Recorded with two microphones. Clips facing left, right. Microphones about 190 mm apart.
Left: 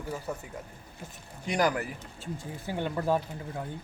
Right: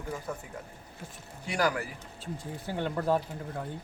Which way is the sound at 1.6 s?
15° left (ahead or behind).